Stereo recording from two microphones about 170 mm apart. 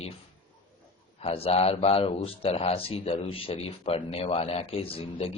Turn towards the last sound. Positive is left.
turn(degrees=35)  # may be behind; listen again after turning